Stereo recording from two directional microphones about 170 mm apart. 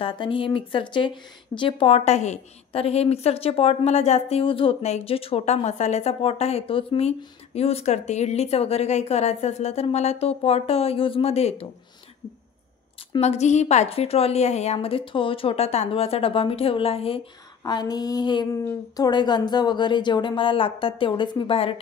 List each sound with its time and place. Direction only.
0.0 s speech: 30° left (ahead or behind)
13.2 s speech: 40° left (ahead or behind)
17.6 s a woman's voice: 25° left (ahead or behind)